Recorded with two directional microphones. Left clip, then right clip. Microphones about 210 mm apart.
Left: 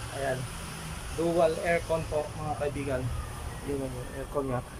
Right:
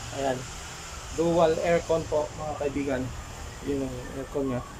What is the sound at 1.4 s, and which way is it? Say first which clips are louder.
Speech: right 3 dB; centre (ahead or behind).